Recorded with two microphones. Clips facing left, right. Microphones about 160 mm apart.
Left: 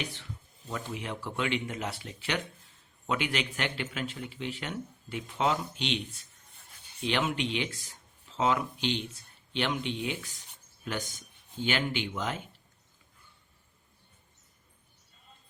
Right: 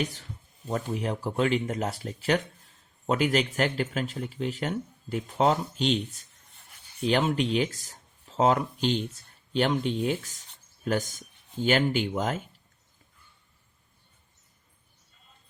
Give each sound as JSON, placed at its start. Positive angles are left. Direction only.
{"t": 0.0, "sound": "speech", "side_deg": -40}
{"t": 7.0, "sound": "speech", "side_deg": -40}